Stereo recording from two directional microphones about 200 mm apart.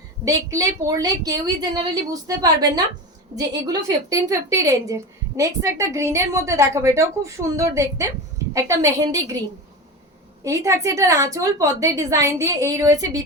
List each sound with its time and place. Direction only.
0.3 s a woman's voice: 15° right (ahead or behind)
10.4 s a woman's voice: 15° right (ahead or behind)